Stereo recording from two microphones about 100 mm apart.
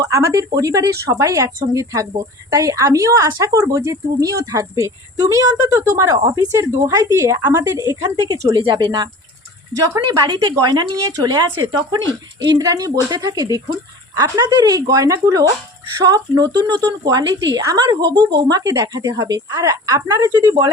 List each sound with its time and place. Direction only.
0.0 s a woman's voice: 30° right (ahead or behind)
8.5 s a woman's voice: 50° right (ahead or behind)